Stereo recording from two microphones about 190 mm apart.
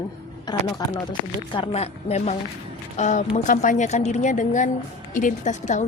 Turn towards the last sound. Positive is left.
turn(degrees=40)  # may be behind; listen again after turning